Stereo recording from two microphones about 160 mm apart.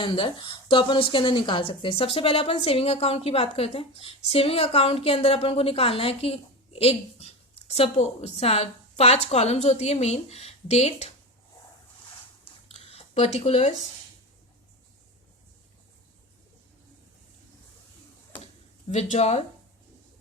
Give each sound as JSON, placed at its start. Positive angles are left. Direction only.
{"t": 0.0, "sound": "a woman's voice", "side_deg": 30}
{"t": 12.6, "sound": "a sound", "side_deg": 40}
{"t": 19.1, "sound": "a woman's voice", "side_deg": 45}